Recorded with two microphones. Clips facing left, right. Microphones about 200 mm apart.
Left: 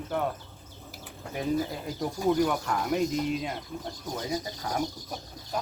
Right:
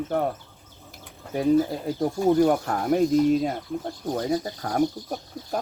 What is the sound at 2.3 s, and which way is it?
Speech, 45° right (ahead or behind).